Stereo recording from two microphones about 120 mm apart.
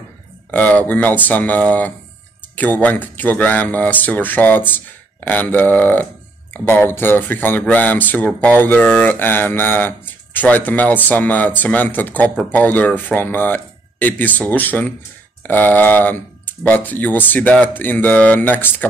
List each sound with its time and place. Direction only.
0.5 s speech: 10° left (ahead or behind)